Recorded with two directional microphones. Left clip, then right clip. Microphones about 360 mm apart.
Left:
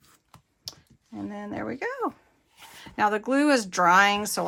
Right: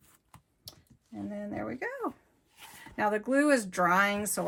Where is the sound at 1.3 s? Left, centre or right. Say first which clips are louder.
Left 3 dB; centre.